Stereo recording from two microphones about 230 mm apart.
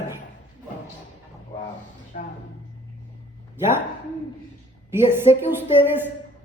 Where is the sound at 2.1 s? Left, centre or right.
Left.